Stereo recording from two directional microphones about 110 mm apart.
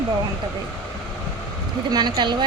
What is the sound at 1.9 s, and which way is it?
Speech, 40° right (ahead or behind).